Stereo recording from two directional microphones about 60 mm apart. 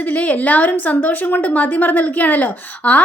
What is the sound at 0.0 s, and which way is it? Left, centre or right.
A woman's voice, left.